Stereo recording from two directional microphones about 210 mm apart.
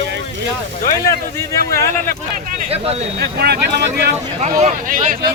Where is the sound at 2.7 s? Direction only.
30° right (ahead or behind).